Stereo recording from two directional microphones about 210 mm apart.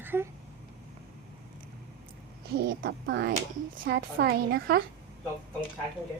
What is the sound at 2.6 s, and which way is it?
A woman's voice, 55° right (ahead or behind).